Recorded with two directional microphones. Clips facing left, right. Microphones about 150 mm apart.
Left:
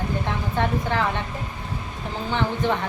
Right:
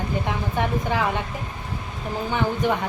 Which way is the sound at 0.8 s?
10° right (ahead or behind).